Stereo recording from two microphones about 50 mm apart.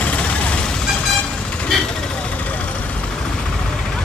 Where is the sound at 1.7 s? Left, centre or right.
Centre.